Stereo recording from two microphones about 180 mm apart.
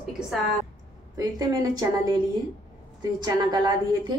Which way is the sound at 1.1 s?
20° right (ahead or behind).